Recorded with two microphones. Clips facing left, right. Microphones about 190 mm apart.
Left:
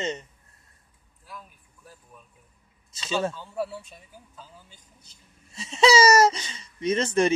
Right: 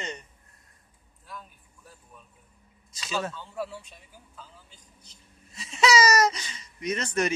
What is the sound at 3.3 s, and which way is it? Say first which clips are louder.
Speech: left 3 dB; 10° left (ahead or behind).